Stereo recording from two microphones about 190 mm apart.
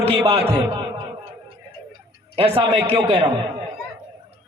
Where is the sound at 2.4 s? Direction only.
30° right (ahead or behind).